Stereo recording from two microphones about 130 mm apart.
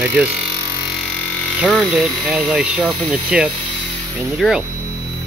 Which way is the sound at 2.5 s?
10° right (ahead or behind).